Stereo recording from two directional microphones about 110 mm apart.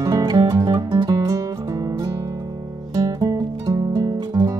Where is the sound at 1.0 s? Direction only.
30° right (ahead or behind).